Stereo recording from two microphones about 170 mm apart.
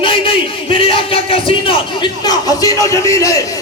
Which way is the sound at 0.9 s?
30° left (ahead or behind).